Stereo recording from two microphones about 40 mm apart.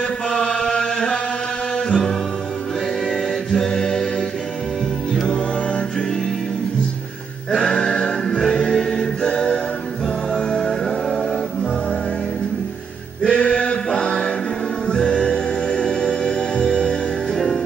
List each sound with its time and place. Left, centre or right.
0.3 s chant: centre
1.9 s music: centre
3.1 s a capella: centre
7.5 s music: centre
9.2 s music: left
10.5 s music: centre
13.2 s a sound: left
14.9 s music: centre